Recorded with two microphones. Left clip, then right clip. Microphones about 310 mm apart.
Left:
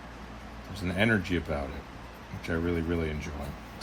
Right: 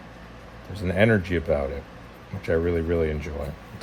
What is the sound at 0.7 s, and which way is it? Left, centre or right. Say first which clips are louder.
Speech: right 6 dB; right.